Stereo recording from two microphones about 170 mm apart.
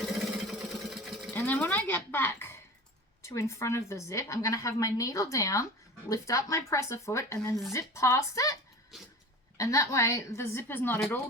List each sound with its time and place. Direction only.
0.0 s sewing machine: centre (ahead or behind)
2.0 s a woman's voice: 15° left (ahead or behind)
8.9 s cough: centre (ahead or behind)
9.6 s speech: 20° left (ahead or behind)